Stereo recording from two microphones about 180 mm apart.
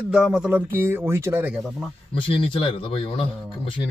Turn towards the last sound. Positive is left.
turn(degrees=30)  # may be behind; listen again after turning